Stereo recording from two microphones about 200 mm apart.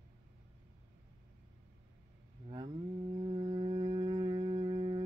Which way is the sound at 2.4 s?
30° right (ahead or behind).